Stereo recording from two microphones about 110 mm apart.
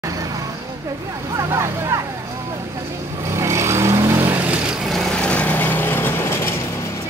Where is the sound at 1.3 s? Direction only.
25° right (ahead or behind).